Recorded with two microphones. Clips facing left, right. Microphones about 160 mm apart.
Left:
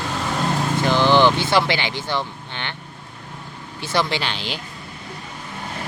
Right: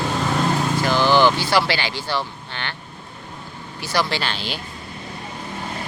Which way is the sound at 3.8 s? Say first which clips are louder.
Left 1 dB; 25° left (ahead or behind).